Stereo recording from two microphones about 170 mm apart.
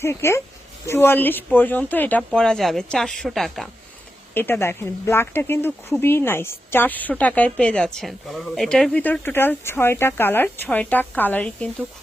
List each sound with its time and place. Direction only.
0.0 s a woman's voice: 15° left (ahead or behind)
4.4 s a woman's voice: 10° left (ahead or behind)